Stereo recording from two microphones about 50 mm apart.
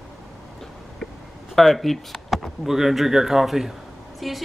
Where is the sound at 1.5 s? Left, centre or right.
Centre.